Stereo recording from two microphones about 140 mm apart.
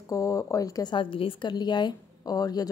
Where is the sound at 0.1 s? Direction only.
20° left (ahead or behind).